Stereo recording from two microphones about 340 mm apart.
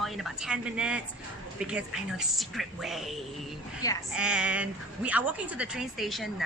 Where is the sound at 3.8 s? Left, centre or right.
Centre.